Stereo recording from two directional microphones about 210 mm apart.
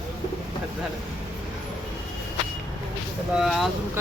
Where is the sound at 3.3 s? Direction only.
Centre (ahead or behind).